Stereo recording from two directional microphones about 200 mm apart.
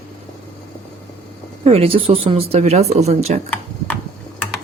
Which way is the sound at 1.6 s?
30° right (ahead or behind).